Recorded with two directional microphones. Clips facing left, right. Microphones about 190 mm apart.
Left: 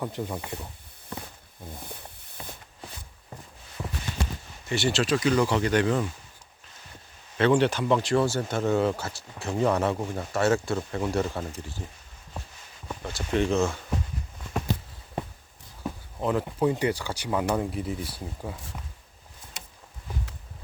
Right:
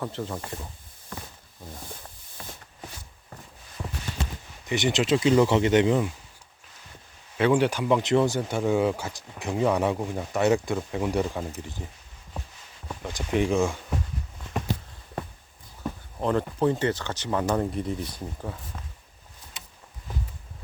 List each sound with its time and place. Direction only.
0.0 s speech: 15° left (ahead or behind)
2.4 s a sound: 20° left (ahead or behind)
4.6 s speech: 20° right (ahead or behind)
7.3 s speech: 10° right (ahead or behind)
13.0 s speech: 15° right (ahead or behind)
15.8 s speech: 5° left (ahead or behind)